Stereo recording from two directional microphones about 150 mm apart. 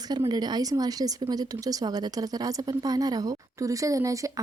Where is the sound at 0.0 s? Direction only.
25° right (ahead or behind).